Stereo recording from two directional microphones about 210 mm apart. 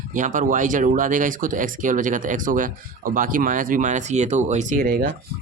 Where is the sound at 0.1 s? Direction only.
40° right (ahead or behind).